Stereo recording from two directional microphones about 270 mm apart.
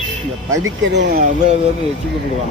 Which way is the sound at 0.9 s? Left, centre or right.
Right.